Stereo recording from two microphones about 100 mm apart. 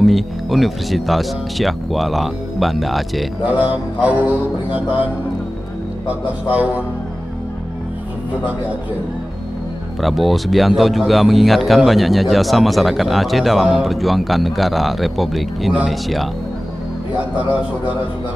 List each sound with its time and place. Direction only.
0.0 s speech: centre (ahead or behind)
3.4 s mantra: 15° right (ahead or behind)
9.9 s speech: centre (ahead or behind)
17.2 s mantra: 15° right (ahead or behind)